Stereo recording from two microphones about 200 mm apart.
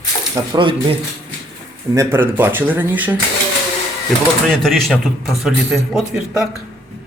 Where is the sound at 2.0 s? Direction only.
10° right (ahead or behind).